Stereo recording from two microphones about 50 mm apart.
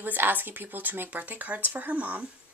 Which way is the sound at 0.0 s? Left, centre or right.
Right.